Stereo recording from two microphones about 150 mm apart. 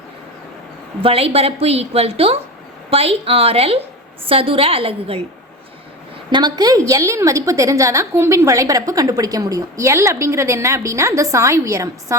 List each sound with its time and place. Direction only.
1.0 s a woman's voice: 40° right (ahead or behind)
6.3 s a woman's voice: 30° right (ahead or behind)